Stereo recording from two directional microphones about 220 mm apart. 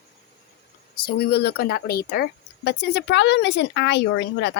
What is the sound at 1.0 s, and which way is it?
Speech, 45° left (ahead or behind).